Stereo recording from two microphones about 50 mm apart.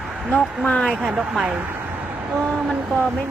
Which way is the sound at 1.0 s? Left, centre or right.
Centre.